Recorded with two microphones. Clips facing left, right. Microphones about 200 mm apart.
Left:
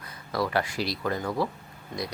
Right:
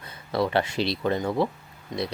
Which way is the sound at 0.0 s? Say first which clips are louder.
Right 3 dB; 25° right (ahead or behind).